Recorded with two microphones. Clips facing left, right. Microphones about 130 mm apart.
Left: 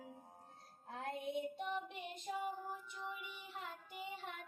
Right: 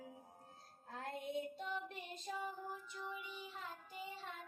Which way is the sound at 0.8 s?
20° left (ahead or behind).